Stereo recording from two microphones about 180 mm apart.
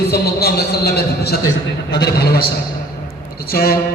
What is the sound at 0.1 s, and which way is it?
A man's voice, 60° left (ahead or behind).